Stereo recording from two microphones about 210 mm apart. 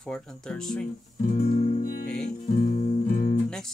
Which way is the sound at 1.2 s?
40° left (ahead or behind).